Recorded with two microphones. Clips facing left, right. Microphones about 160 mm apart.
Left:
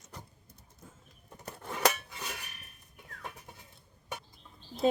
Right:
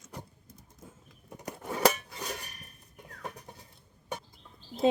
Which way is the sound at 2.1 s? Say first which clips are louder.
Right 4 dB; 35° right (ahead or behind).